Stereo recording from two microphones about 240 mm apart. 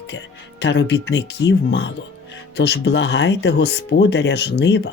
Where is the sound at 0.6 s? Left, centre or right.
Left.